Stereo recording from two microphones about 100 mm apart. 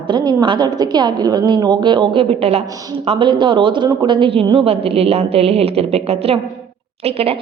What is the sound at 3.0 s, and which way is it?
A woman's voice, 55° right (ahead or behind).